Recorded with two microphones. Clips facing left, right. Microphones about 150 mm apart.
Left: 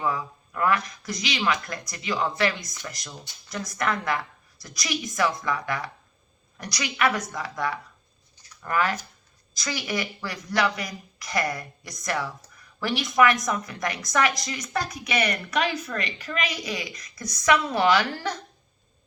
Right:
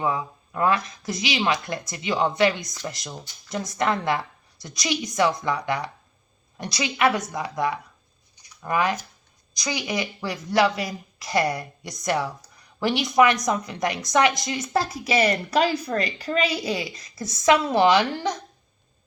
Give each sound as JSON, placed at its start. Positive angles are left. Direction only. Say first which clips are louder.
{"t": 0.0, "sound": "speech", "louder": "right 2 dB", "side_deg": -20}
{"t": 8.4, "sound": "a sound", "louder": "right 2 dB", "side_deg": -15}
{"t": 9.6, "sound": "speech", "louder": "right 2 dB", "side_deg": -20}